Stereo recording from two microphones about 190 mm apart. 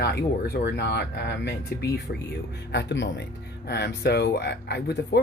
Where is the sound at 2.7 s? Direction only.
70° left (ahead or behind).